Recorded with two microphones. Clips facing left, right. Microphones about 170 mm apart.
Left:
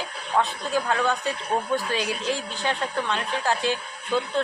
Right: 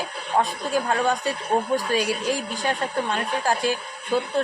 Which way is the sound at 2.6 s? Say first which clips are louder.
Right 1 dB; 45° right (ahead or behind).